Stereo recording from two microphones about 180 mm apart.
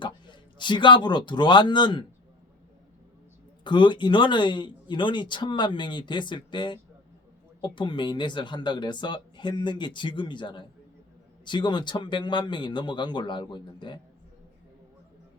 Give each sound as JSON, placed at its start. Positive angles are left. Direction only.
{"t": 0.0, "sound": "a man's voice", "side_deg": 25}
{"t": 3.6, "sound": "speech", "side_deg": 25}